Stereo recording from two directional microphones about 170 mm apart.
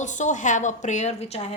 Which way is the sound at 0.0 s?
45° left (ahead or behind).